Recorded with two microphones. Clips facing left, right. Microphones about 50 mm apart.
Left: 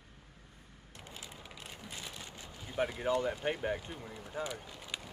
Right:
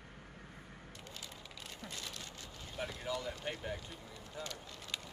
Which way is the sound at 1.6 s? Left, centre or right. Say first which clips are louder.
Even; centre.